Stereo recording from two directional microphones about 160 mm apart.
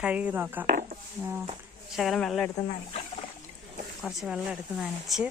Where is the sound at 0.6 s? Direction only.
60° right (ahead or behind).